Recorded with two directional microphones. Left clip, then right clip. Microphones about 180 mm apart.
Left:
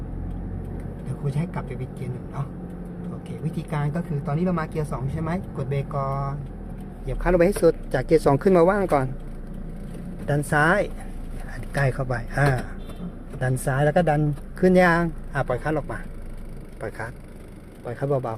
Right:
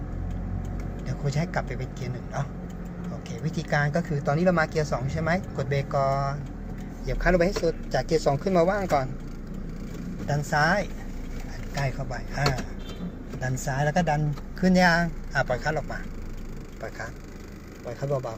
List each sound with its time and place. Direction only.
3.4 s speech: 5° left (ahead or behind)
7.1 s speech: 30° left (ahead or behind)
7.3 s speech: 55° left (ahead or behind)
10.2 s speech: 60° left (ahead or behind)
13.4 s speech: 55° left (ahead or behind)
17.8 s speech: 60° left (ahead or behind)